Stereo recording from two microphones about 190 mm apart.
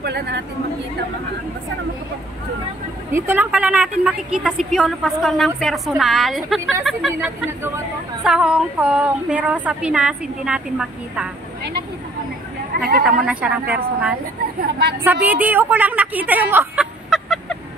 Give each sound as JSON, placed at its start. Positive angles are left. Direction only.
{"t": 0.0, "sound": "speech", "side_deg": -60}
{"t": 3.1, "sound": "a woman's voice", "side_deg": -10}
{"t": 12.7, "sound": "speech", "side_deg": -55}
{"t": 13.0, "sound": "a woman's voice", "side_deg": -5}
{"t": 14.6, "sound": "speech", "side_deg": -60}
{"t": 15.0, "sound": "a woman's voice", "side_deg": -10}